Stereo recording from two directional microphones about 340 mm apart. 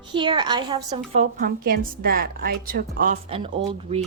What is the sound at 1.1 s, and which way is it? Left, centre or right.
A woman's voice, right.